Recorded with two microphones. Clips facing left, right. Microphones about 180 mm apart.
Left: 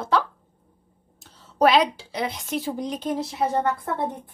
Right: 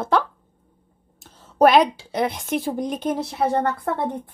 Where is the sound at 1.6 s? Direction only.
50° right (ahead or behind).